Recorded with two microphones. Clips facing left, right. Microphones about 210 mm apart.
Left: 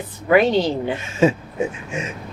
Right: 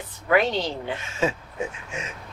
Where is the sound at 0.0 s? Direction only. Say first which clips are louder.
Left 6 dB; 10° left (ahead or behind).